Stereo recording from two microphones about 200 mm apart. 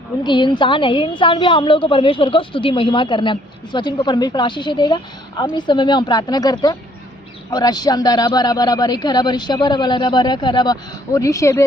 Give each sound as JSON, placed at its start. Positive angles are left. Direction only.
{"t": 0.2, "sound": "a woman's voice", "side_deg": 20}